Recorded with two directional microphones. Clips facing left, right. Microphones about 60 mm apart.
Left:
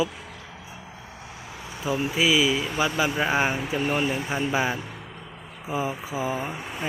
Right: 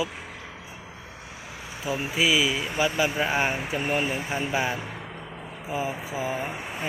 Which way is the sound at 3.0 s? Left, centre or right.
Centre.